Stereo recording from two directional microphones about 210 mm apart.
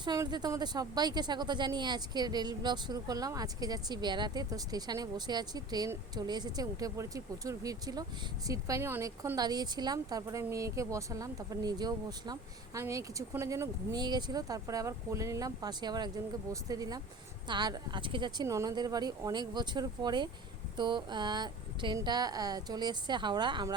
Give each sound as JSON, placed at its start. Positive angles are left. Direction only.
{"t": 0.0, "sound": "a woman's voice", "side_deg": -20}